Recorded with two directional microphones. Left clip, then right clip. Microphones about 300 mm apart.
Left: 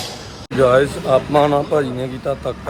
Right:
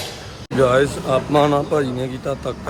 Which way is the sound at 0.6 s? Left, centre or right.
Centre.